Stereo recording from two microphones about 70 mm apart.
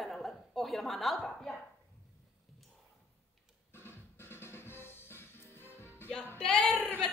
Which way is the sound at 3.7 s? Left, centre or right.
Left.